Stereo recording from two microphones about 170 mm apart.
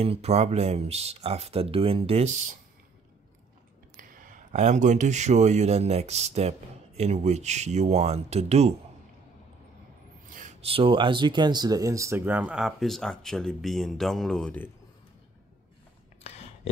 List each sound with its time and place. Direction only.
0.0 s speech: 35° right (ahead or behind)
3.9 s speech: 55° right (ahead or behind)
10.2 s a sound: 50° right (ahead or behind)
10.6 s speech: 30° right (ahead or behind); by 14.7 s 5° left (ahead or behind)